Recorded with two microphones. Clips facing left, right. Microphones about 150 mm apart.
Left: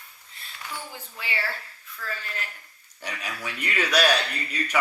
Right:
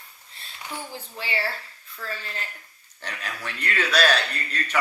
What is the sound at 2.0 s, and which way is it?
Speech, 30° right (ahead or behind).